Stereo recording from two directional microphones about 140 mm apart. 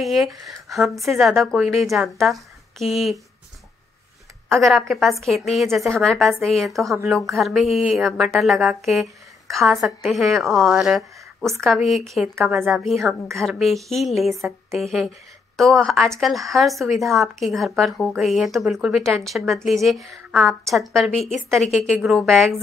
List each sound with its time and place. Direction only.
0.0 s a woman's voice: centre (ahead or behind)
4.6 s a woman's voice: centre (ahead or behind)